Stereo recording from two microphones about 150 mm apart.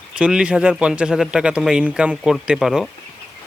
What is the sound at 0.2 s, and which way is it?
A man's voice, 5° right (ahead or behind).